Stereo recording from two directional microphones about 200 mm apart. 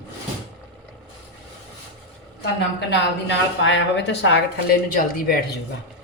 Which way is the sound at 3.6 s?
65° left (ahead or behind).